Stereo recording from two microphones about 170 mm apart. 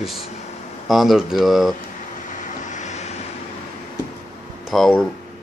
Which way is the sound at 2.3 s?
45° left (ahead or behind).